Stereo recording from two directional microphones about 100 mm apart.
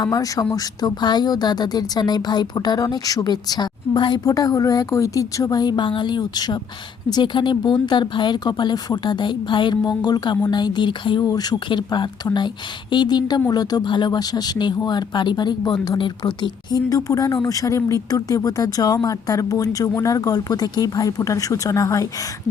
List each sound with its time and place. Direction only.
0.0 s a woman's voice: 35° left (ahead or behind); by 11.3 s 55° left (ahead or behind)
11.3 s a woman's voice: 40° left (ahead or behind)